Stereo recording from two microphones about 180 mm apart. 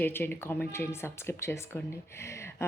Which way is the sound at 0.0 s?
10° left (ahead or behind).